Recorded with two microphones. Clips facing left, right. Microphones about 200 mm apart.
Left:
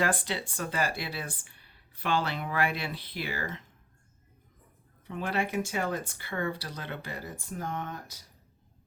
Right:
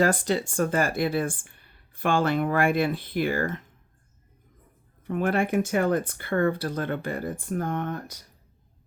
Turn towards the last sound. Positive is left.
turn(degrees=-55)  # may be behind; listen again after turning